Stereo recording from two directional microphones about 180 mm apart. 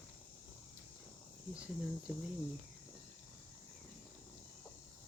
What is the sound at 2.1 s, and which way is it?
Cricket, 5° right (ahead or behind).